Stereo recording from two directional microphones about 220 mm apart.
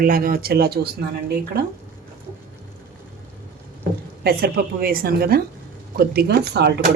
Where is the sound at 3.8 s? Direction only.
45° right (ahead or behind).